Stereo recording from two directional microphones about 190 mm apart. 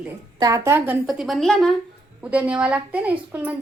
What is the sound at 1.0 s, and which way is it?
A woman's voice, centre (ahead or behind).